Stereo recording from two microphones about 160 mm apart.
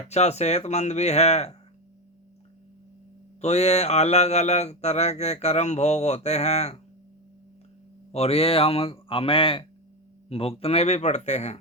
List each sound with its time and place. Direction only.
0.0 s speech: 40° left (ahead or behind)
3.4 s speech: 40° left (ahead or behind)
8.1 s speech: 40° left (ahead or behind)